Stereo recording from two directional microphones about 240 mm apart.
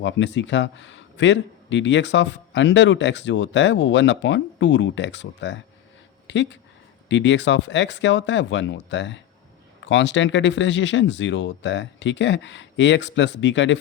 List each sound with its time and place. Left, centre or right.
0.0 s speech: left